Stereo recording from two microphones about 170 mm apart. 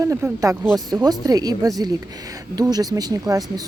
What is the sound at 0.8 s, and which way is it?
Speech, 20° right (ahead or behind).